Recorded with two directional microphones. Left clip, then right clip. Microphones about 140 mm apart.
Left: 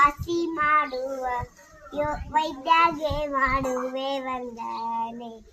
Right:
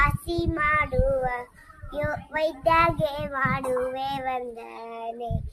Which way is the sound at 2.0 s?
30° right (ahead or behind).